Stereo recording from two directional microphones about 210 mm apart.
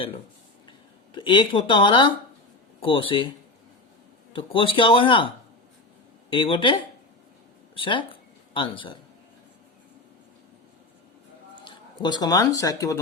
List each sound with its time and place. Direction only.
1.1 s speech: 20° left (ahead or behind)
4.3 s speech: 25° left (ahead or behind)
6.3 s speech: 25° left (ahead or behind)
7.8 s speech: 25° left (ahead or behind)
11.6 s speech: 20° left (ahead or behind)